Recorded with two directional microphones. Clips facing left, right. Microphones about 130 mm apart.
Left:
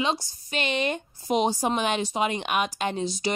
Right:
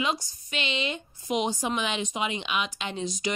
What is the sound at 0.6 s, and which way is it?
Speech, 50° left (ahead or behind).